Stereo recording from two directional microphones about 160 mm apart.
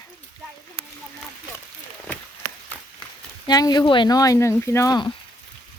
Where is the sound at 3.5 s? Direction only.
25° left (ahead or behind).